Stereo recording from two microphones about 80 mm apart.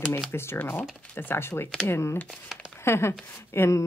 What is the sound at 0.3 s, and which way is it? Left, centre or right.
Speech, left.